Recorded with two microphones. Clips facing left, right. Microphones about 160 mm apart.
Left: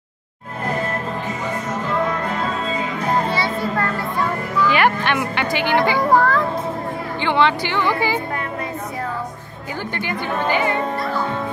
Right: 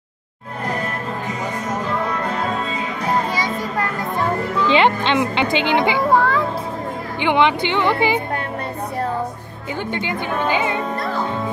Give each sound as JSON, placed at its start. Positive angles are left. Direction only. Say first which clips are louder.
{"t": 3.3, "sound": "music", "louder": "left 2 dB", "side_deg": -15}
{"t": 4.6, "sound": "speech", "louder": "right 1 dB", "side_deg": -20}
{"t": 6.0, "sound": "music", "louder": "even", "side_deg": 0}
{"t": 7.2, "sound": "speech", "louder": "right 2 dB", "side_deg": -15}
{"t": 9.9, "sound": "speech", "louder": "even", "side_deg": -20}